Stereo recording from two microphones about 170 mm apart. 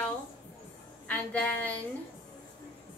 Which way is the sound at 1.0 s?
10° left (ahead or behind).